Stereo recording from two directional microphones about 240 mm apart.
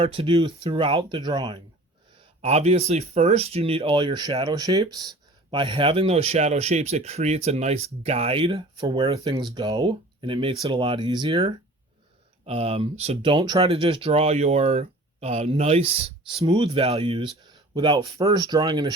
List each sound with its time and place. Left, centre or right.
0.0 s speech: right